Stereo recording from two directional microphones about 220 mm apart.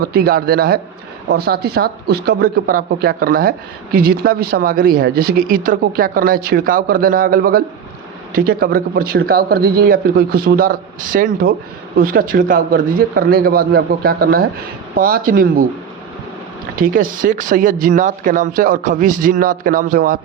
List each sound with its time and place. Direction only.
0.0 s speech: 45° right (ahead or behind)
16.7 s speech: 40° right (ahead or behind)